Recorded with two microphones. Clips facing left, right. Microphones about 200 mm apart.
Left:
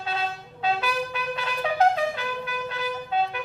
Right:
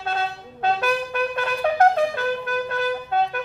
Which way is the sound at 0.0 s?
50° right (ahead or behind).